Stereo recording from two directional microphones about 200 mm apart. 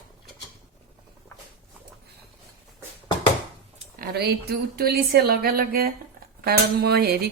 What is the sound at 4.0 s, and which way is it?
A woman's voice, 50° right (ahead or behind).